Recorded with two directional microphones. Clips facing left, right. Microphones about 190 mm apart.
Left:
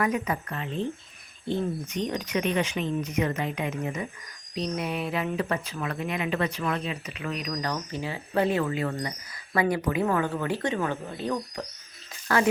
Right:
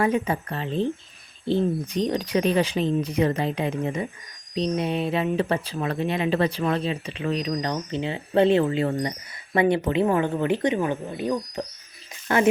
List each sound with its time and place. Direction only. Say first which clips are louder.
0.0 s speech: right 4 dB; 30° right (ahead or behind)